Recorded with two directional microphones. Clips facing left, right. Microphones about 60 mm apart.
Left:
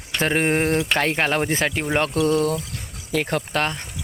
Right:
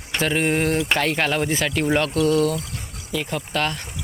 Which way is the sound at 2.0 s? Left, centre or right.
Left.